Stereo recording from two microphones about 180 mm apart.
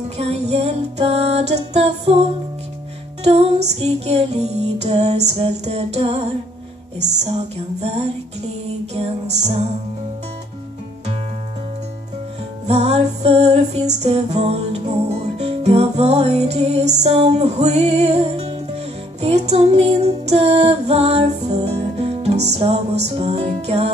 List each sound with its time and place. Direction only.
0.2 s music: 35° right (ahead or behind)
3.3 s music: 35° right (ahead or behind)
12.6 s music: 35° right (ahead or behind)